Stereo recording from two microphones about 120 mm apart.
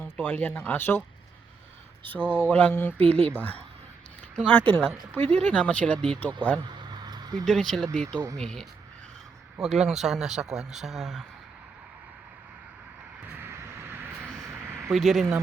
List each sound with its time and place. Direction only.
0.0 s speech: 15° left (ahead or behind)
2.5 s speech: 15° left (ahead or behind)
3.0 s speech: 60° right (ahead or behind)
3.2 s speech: 15° left (ahead or behind)
5.2 s speech: 65° right (ahead or behind)
5.5 s speech: 10° left (ahead or behind)
7.0 s a sound: 35° right (ahead or behind)
7.4 s speech: 5° left (ahead or behind)
13.4 s a sound: 20° right (ahead or behind)
14.9 s speech: centre (ahead or behind)